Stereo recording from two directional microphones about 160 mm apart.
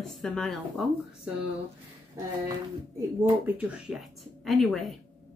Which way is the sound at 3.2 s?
5° right (ahead or behind).